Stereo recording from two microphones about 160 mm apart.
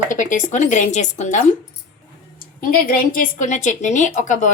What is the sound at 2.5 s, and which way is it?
A woman's voice, 60° left (ahead or behind).